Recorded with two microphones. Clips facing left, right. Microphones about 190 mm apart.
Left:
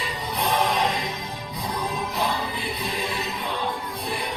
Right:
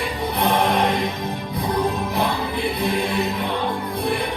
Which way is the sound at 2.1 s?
60° right (ahead or behind).